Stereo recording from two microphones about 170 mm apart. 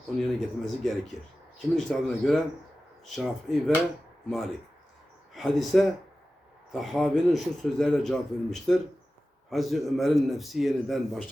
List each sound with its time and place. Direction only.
0.2 s a man's voice: centre (ahead or behind)